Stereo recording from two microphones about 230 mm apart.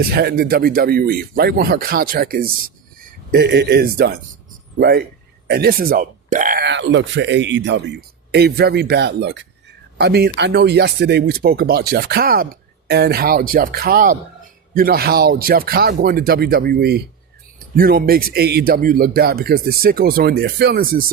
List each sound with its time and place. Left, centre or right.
0.1 s speech: right